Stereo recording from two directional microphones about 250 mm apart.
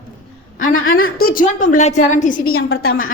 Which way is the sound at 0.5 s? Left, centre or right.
Left.